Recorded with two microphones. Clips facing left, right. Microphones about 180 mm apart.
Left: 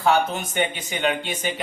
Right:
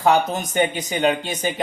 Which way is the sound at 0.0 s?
40° right (ahead or behind).